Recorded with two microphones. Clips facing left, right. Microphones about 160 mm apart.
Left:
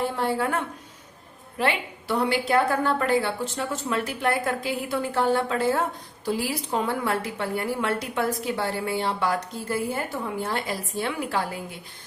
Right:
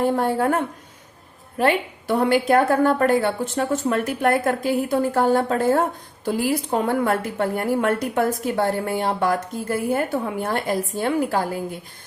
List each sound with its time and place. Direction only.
0.0 s a woman's voice: 45° right (ahead or behind)